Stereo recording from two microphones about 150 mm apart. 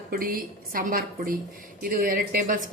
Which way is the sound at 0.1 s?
70° right (ahead or behind).